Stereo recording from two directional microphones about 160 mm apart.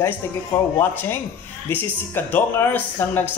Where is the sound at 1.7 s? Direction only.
10° left (ahead or behind).